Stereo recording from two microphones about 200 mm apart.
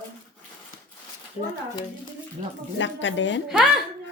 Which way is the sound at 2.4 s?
35° right (ahead or behind).